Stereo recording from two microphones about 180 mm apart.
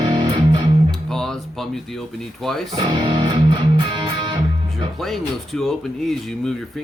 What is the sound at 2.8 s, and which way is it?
Music, 30° right (ahead or behind).